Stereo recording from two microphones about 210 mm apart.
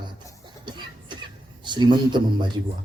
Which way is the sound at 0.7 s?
20° right (ahead or behind).